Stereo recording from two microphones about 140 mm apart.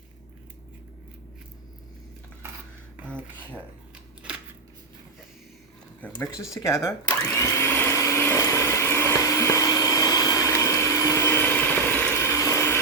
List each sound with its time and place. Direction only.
3.2 s a sound: 10° right (ahead or behind)
6.0 s speech: 15° left (ahead or behind)
7.3 s vacuum cleaner: 20° left (ahead or behind)